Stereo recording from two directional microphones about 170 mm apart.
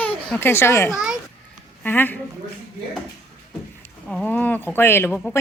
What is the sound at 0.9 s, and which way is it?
Speech, 5° right (ahead or behind).